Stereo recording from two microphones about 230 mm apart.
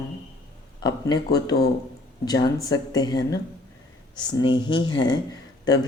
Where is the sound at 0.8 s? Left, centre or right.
Centre.